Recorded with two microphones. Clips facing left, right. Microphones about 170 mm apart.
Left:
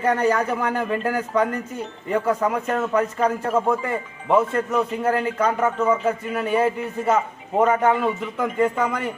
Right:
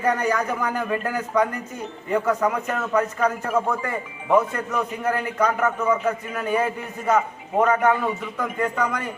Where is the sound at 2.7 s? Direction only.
30° left (ahead or behind).